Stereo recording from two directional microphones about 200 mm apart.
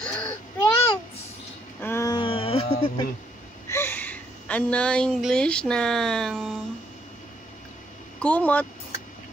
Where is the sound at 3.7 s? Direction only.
10° left (ahead or behind).